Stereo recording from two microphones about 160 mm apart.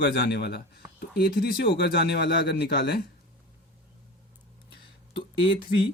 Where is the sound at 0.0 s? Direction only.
90° left.